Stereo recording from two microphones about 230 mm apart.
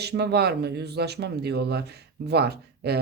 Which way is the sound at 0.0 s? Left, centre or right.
Right.